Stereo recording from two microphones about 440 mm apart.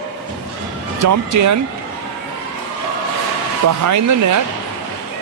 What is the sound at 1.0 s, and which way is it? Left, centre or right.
Speech, right.